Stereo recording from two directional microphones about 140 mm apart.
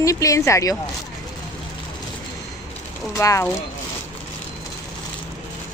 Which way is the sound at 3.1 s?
20° left (ahead or behind).